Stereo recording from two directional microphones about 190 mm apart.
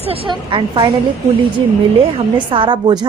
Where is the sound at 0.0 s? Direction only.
30° right (ahead or behind).